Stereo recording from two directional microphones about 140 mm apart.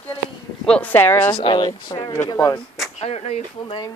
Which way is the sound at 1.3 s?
35° left (ahead or behind).